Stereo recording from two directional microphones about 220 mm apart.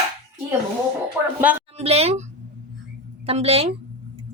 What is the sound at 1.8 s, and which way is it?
Speech, 30° right (ahead or behind).